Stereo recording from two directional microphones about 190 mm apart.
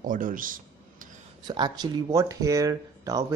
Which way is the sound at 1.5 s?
20° right (ahead or behind).